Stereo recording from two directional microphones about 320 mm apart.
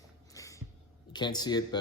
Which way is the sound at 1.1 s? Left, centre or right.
Centre.